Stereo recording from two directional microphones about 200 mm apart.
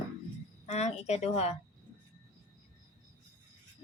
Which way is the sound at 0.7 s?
35° left (ahead or behind).